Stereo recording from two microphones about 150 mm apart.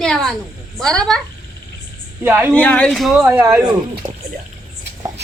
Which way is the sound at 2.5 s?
10° left (ahead or behind).